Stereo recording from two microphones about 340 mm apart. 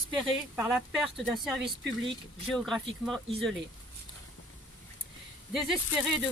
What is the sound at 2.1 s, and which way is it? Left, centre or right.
Speech, centre.